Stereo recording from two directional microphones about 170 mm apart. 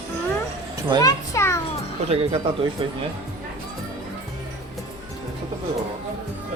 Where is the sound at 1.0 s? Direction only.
20° left (ahead or behind).